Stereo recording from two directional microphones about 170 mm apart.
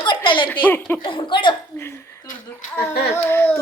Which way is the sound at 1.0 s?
30° left (ahead or behind).